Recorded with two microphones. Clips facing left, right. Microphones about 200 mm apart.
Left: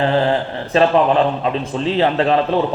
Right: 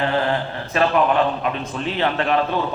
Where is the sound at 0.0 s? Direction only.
30° left (ahead or behind).